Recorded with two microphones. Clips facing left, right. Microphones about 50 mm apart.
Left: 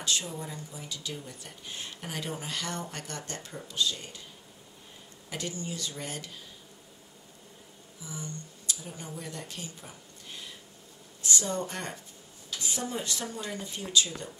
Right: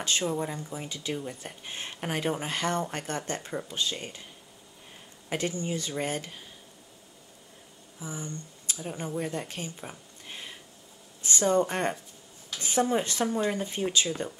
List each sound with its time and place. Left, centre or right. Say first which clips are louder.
0.0 s speech: right 5 dB; right
5.3 s speech: right 6 dB; right
8.0 s speech: right 3 dB; right
12.4 s a sound: right 8 dB; right
13.0 s speech: right 8 dB; right